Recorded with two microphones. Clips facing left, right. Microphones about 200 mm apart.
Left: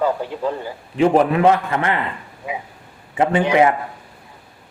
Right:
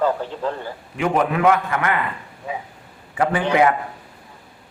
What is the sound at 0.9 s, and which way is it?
Speech, 30° left (ahead or behind).